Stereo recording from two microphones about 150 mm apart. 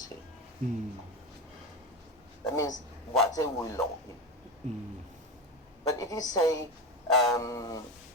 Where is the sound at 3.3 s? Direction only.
20° left (ahead or behind).